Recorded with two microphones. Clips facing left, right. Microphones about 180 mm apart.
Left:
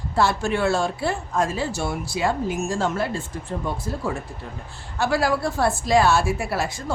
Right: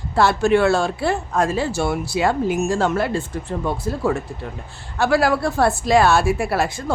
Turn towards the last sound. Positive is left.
turn(degrees=-60)  # may be behind; listen again after turning